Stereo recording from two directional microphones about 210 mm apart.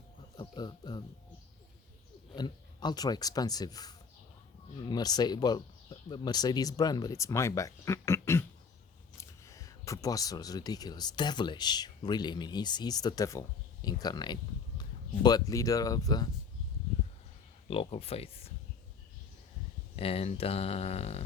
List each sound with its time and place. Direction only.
0.3 s speech: 20° left (ahead or behind)
2.3 s speech: 20° left (ahead or behind)
17.7 s speech: 25° left (ahead or behind)
20.0 s speech: 25° left (ahead or behind)